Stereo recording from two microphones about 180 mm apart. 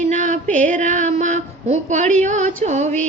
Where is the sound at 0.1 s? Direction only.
45° right (ahead or behind).